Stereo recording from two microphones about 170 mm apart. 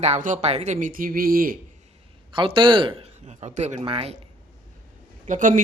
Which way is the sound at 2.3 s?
30° right (ahead or behind).